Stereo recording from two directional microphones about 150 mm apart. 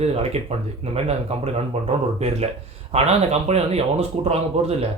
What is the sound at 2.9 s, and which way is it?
Speech, 45° right (ahead or behind).